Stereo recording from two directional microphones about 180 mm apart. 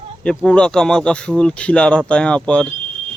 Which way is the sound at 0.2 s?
5° left (ahead or behind).